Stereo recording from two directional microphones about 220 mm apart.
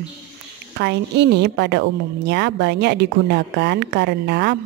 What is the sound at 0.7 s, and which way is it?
A woman's voice, 50° right (ahead or behind).